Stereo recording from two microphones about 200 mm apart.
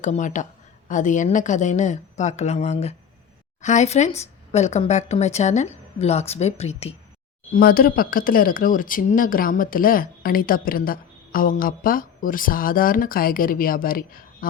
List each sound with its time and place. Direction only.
0.0 s speech: 35° left (ahead or behind)
7.5 s speech: 45° left (ahead or behind)